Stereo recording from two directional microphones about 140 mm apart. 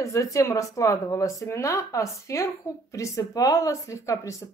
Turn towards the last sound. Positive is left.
turn(degrees=20)  # may be behind; listen again after turning